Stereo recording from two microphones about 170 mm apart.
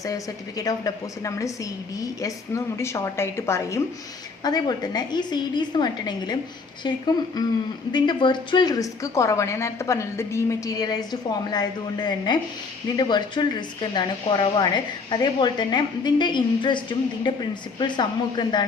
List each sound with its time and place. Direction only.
0.0 s a woman's voice: 20° left (ahead or behind)
2.7 s a woman's voice: 15° left (ahead or behind)